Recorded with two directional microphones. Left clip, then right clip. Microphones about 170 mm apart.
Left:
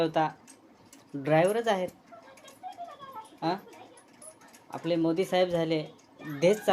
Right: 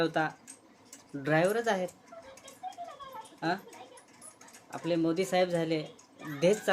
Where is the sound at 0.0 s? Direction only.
10° right (ahead or behind).